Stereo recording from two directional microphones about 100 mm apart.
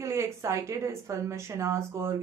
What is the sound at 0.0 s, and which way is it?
Speech, 30° right (ahead or behind).